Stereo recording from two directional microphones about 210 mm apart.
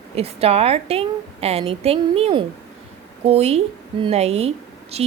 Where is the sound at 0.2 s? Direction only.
30° right (ahead or behind).